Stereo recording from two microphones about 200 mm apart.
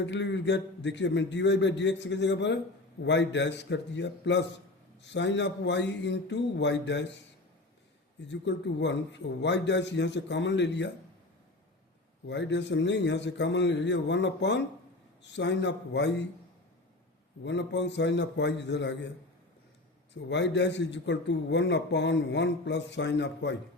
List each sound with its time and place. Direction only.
0.0 s a man's voice: 60° left (ahead or behind)
8.3 s a man's voice: 60° left (ahead or behind)
12.3 s a man's voice: 60° left (ahead or behind)
17.4 s a man's voice: 60° left (ahead or behind)
20.3 s a man's voice: 60° left (ahead or behind)